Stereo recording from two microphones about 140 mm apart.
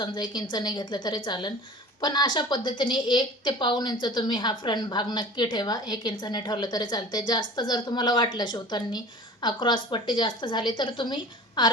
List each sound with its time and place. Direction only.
0.0 s a woman's voice: 30° left (ahead or behind)